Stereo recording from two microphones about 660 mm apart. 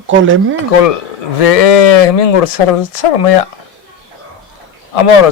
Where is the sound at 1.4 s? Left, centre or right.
Left.